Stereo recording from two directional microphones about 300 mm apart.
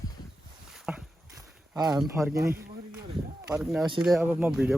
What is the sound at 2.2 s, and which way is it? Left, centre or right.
Speech, centre.